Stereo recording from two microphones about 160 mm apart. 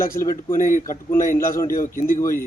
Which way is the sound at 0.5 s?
55° left (ahead or behind).